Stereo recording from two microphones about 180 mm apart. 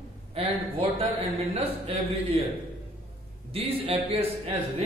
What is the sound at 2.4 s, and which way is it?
A man's voice, 30° right (ahead or behind).